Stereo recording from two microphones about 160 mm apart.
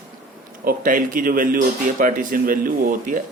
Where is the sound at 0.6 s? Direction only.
60° right (ahead or behind).